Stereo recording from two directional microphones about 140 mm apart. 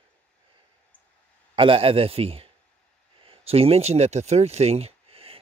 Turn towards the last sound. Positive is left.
turn(degrees=-40)  # may be behind; listen again after turning